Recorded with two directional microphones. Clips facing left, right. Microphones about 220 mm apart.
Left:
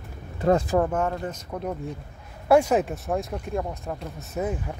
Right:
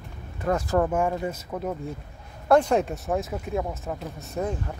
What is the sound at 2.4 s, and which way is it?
Speech, 5° left (ahead or behind).